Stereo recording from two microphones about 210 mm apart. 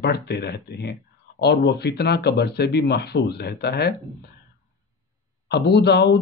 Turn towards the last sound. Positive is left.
turn(degrees=55)  # may be behind; listen again after turning